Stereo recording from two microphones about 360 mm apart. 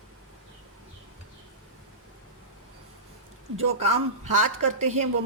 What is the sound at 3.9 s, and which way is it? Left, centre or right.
Speech, right.